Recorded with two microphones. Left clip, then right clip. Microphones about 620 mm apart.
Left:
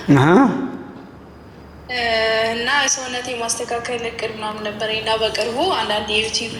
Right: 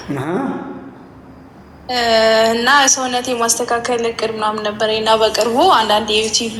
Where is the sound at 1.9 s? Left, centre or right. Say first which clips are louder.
Right 6 dB; right.